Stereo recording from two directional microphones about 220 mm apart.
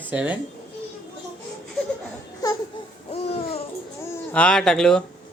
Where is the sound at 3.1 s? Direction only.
25° left (ahead or behind).